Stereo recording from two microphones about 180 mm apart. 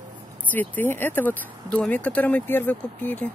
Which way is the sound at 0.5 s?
10° left (ahead or behind).